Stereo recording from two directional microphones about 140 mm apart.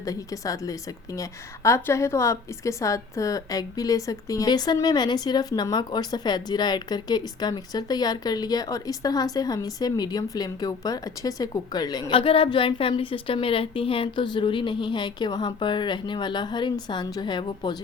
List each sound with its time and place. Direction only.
0.0 s a woman's voice: 25° left (ahead or behind)